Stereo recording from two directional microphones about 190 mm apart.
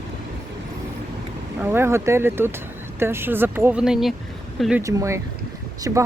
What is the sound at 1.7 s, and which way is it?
Speech, 15° right (ahead or behind).